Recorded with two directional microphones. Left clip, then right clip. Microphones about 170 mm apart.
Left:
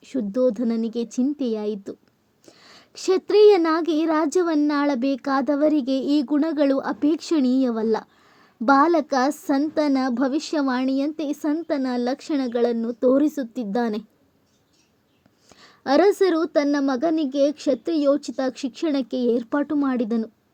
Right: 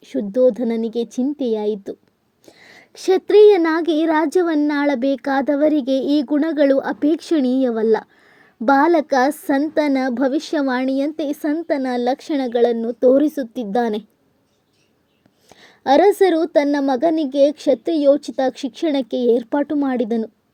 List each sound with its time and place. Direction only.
0.0 s speech: 20° right (ahead or behind)
15.4 s speech: 25° right (ahead or behind)